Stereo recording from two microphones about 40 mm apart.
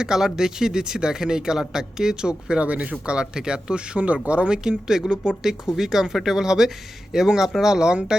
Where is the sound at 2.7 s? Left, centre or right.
Right.